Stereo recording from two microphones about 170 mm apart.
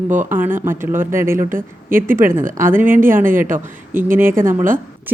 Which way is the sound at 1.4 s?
50° right (ahead or behind).